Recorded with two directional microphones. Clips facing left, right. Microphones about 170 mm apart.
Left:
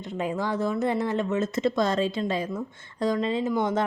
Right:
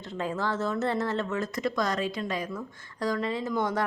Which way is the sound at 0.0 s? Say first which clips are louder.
Left 2 dB; 15° left (ahead or behind).